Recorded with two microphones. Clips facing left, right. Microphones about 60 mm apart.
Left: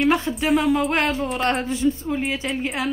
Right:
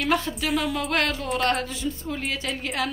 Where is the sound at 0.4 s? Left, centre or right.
Centre.